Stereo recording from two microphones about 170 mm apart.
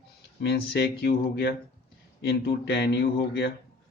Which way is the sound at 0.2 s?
70° left (ahead or behind).